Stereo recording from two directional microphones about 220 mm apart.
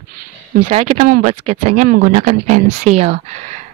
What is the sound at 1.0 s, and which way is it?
A woman's voice, 35° right (ahead or behind).